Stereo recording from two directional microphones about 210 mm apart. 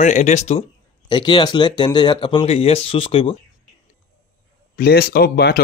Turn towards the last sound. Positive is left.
turn(degrees=50)  # may be behind; listen again after turning